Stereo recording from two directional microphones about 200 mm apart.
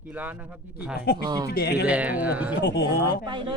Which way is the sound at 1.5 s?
50° left (ahead or behind).